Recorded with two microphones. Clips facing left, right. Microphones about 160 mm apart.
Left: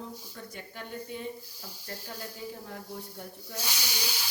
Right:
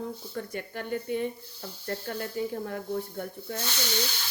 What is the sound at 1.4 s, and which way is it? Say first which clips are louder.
Speech: right 6 dB; 10° left (ahead or behind).